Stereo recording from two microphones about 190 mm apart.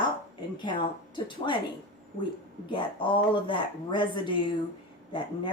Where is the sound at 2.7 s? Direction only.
25° left (ahead or behind).